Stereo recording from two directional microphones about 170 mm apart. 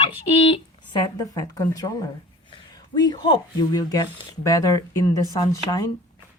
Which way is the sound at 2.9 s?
25° left (ahead or behind).